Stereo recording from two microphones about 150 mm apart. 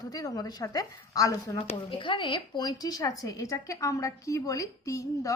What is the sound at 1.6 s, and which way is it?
Speech, 35° left (ahead or behind).